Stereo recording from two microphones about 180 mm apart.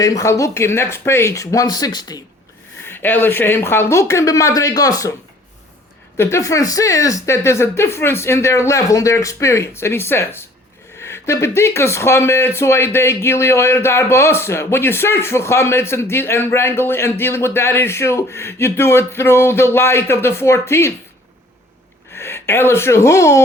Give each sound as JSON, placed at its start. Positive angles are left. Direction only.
{"t": 0.0, "sound": "speech", "side_deg": 20}
{"t": 2.8, "sound": "speech", "side_deg": 10}
{"t": 6.1, "sound": "speech", "side_deg": 15}
{"t": 22.1, "sound": "speech", "side_deg": 15}